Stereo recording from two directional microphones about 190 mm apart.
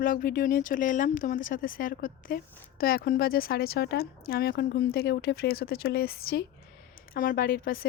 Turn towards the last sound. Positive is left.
turn(degrees=50)  # may be behind; listen again after turning